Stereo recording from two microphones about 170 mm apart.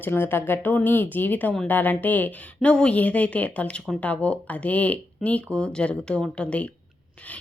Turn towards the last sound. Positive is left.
turn(degrees=5)  # may be behind; listen again after turning